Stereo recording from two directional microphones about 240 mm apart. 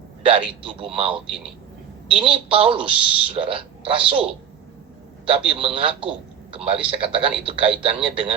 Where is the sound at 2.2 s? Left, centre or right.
Right.